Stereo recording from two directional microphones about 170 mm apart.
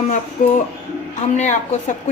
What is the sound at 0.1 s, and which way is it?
A woman's voice, 50° left (ahead or behind).